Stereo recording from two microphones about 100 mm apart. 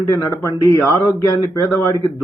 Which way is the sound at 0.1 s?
30° left (ahead or behind).